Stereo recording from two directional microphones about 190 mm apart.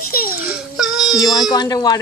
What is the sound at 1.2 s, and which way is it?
Speech, 20° left (ahead or behind).